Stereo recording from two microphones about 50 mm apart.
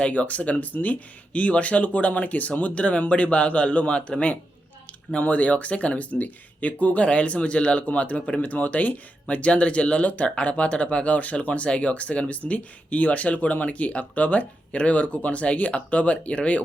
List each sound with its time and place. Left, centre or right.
0.0 s speech: left